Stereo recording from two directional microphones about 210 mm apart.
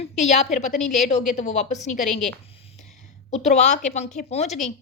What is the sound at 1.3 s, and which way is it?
Speech, 35° left (ahead or behind).